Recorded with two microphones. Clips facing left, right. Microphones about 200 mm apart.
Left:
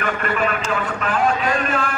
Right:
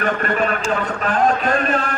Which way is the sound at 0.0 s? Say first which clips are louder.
Right 2 dB; 40° right (ahead or behind).